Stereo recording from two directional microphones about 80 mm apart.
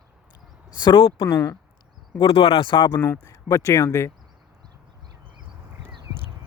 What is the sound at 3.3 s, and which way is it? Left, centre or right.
Speech, left.